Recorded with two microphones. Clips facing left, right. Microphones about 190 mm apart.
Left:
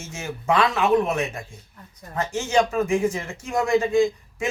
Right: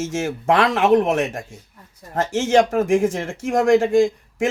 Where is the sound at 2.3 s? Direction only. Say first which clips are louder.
Right 5 dB; 90° right.